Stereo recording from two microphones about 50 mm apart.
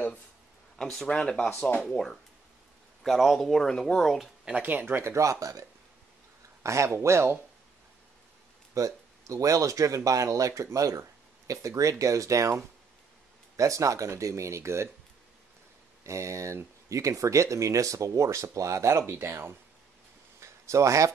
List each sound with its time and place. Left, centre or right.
0.7 s speech: centre
1.0 s speech: centre
1.7 s speech: left
3.0 s speech: centre
4.6 s speech: right
5.0 s speech: right
6.6 s speech: right
9.3 s speech: right
13.6 s speech: right
16.0 s speech: right
20.3 s a sound: right